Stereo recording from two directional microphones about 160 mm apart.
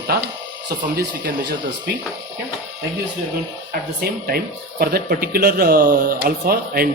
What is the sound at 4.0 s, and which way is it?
Speech, 75° right (ahead or behind).